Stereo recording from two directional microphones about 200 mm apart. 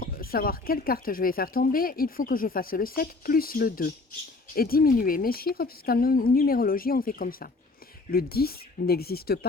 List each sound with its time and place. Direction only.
0.0 s speech: 45° left (ahead or behind)